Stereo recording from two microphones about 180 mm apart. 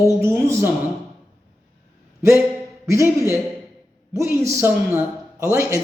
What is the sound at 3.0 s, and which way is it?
A woman's voice, 15° right (ahead or behind).